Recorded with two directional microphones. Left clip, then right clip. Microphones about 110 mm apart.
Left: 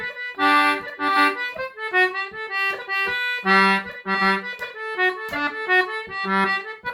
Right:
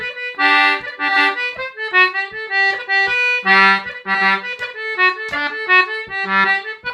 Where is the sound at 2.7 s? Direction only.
10° right (ahead or behind).